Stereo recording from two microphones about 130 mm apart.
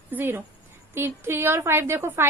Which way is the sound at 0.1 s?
15° right (ahead or behind).